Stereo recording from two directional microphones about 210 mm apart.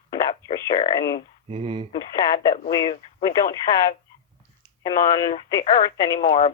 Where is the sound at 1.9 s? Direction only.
20° left (ahead or behind).